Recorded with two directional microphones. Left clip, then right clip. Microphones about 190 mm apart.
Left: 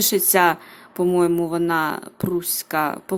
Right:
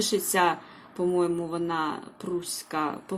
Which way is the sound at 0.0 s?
35° left (ahead or behind).